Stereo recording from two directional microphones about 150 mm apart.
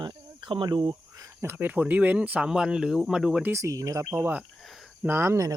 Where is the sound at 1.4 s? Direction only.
15° right (ahead or behind).